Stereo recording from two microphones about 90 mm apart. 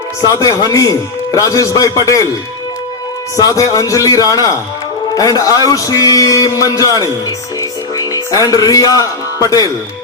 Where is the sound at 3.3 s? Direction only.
40° left (ahead or behind).